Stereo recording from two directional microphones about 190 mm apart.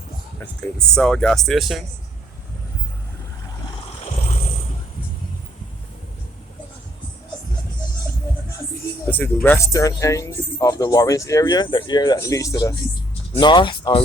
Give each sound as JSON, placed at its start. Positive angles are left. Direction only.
{"t": 0.8, "sound": "speech", "side_deg": 5}
{"t": 9.0, "sound": "speech", "side_deg": 10}